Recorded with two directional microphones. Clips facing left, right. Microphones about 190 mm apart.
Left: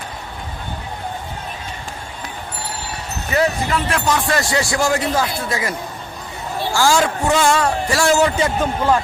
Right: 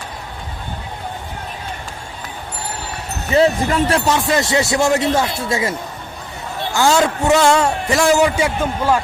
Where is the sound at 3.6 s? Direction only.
40° right (ahead or behind).